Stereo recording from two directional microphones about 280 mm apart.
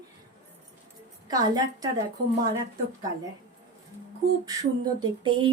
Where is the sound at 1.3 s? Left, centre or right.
Centre.